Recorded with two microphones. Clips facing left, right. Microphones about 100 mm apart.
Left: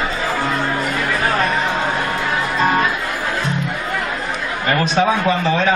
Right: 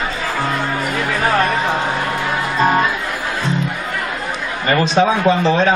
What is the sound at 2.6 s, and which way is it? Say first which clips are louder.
Music: right 2 dB; centre (ahead or behind).